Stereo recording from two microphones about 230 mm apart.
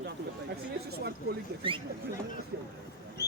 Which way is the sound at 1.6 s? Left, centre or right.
Right.